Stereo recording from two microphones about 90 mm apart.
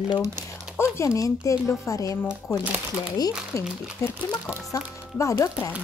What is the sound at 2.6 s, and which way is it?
Speech, 15° right (ahead or behind).